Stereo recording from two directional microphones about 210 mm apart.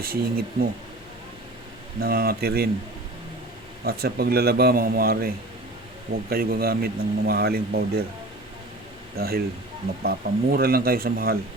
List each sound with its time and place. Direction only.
0.0 s speech: 45° right (ahead or behind)
2.0 s speech: 45° right (ahead or behind)
3.8 s speech: 50° right (ahead or behind)
6.3 s speech: 45° right (ahead or behind)
9.1 s speech: 45° right (ahead or behind)